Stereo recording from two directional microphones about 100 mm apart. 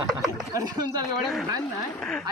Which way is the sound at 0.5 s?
40° right (ahead or behind).